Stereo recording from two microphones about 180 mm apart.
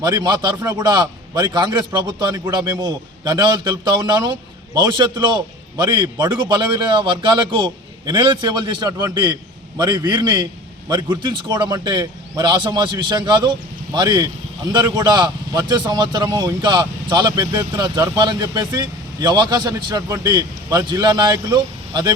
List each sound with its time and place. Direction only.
0.0 s a man's voice: 20° right (ahead or behind)